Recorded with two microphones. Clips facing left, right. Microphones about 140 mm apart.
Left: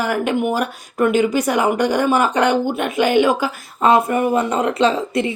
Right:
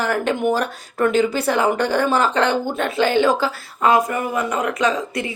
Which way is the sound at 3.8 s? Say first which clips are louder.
Left 3 dB; 25° left (ahead or behind).